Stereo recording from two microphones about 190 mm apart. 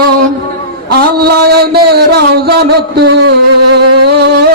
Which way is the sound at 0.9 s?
55° right (ahead or behind).